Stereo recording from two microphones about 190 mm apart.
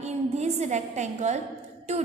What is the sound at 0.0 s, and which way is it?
A woman's voice, 35° right (ahead or behind).